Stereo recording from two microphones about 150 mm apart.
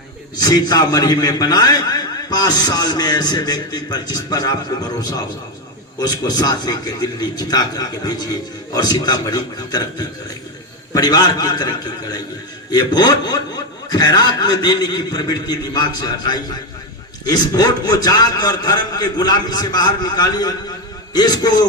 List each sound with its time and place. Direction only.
0.3 s a man's voice: 25° left (ahead or behind)
6.0 s a man's voice: 25° left (ahead or behind)